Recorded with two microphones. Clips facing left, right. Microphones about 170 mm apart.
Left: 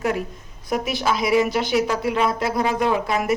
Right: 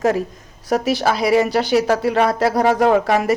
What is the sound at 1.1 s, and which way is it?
Speech, 35° right (ahead or behind).